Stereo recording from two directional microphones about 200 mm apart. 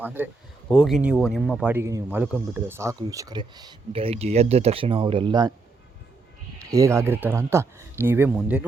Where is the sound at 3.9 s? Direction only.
30° right (ahead or behind).